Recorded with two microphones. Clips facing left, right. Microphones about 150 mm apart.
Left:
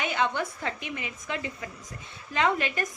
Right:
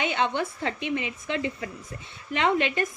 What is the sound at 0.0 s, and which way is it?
A woman's voice, 25° right (ahead or behind).